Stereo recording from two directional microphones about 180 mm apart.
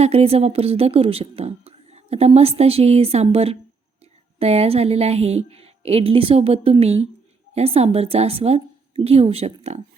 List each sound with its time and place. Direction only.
0.0 s speech: 35° right (ahead or behind)